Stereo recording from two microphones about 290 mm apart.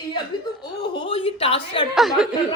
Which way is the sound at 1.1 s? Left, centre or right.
Centre.